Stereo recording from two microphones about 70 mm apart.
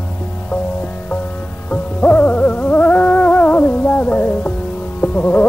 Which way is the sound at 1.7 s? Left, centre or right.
Left.